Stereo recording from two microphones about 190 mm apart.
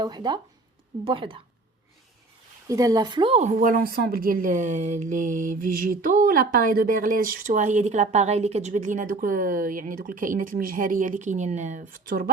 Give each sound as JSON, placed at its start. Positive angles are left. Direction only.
{"t": 0.0, "sound": "speech", "side_deg": -20}
{"t": 2.6, "sound": "speech", "side_deg": -15}